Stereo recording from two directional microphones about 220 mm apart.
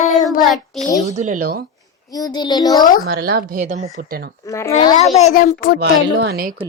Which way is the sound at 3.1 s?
45° right (ahead or behind).